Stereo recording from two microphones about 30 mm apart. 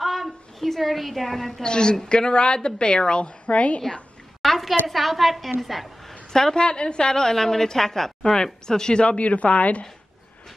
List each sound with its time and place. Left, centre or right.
0.0 s a sound: centre
1.6 s speech: left
3.4 s a woman's voice: left
4.4 s a sound: centre
4.8 s a woman's voice: centre
6.5 s speech: left
7.2 s a woman's voice: centre
8.2 s speech: left
9.0 s a woman's voice: left